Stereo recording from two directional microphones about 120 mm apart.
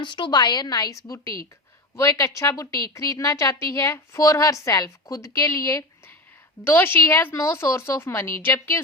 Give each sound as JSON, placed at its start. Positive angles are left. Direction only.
{"t": 0.0, "sound": "a woman's voice", "side_deg": 40}